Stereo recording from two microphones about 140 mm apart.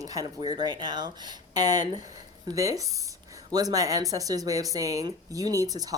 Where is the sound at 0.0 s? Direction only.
25° right (ahead or behind).